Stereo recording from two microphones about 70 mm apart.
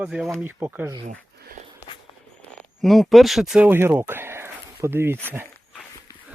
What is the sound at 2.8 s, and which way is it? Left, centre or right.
Speech, centre.